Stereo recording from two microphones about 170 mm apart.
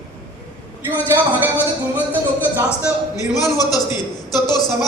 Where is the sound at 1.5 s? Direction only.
10° left (ahead or behind).